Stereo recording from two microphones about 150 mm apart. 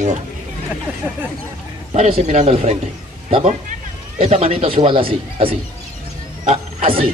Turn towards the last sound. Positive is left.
turn(degrees=-45)  # may be behind; listen again after turning